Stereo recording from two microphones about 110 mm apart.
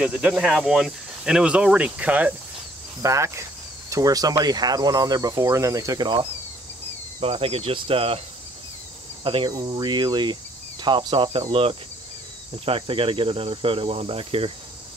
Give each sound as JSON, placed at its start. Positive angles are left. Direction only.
{"t": 0.0, "sound": "speech", "side_deg": -10}
{"t": 3.0, "sound": "speech", "side_deg": -30}
{"t": 7.2, "sound": "cricket", "side_deg": -60}
{"t": 9.2, "sound": "cricket", "side_deg": -50}
{"t": 9.5, "sound": "speech", "side_deg": -35}
{"t": 11.3, "sound": "cricket", "side_deg": -55}